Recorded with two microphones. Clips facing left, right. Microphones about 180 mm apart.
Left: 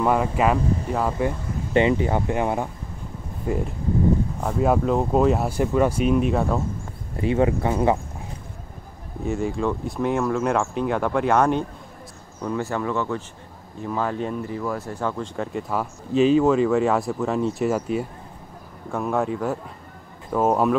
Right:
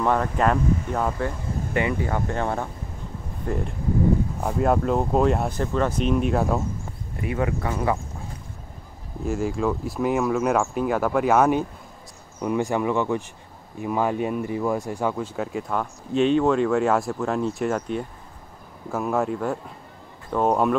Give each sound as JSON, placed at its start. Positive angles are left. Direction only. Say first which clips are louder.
{"t": 0.0, "sound": "speech", "louder": "left 1 dB", "side_deg": 10}
{"t": 1.1, "sound": "speech", "louder": "left 3 dB", "side_deg": 20}
{"t": 4.4, "sound": "speech", "louder": "left 1 dB", "side_deg": -5}
{"t": 7.2, "sound": "speech", "louder": "left 5 dB", "side_deg": 25}
{"t": 9.2, "sound": "speech", "louder": "even", "side_deg": 0}
{"t": 12.4, "sound": "speech", "louder": "right 3 dB", "side_deg": -15}